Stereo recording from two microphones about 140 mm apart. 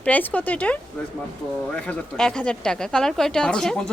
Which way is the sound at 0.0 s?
10° left (ahead or behind).